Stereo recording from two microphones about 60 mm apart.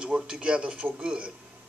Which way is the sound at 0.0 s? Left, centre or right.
Centre.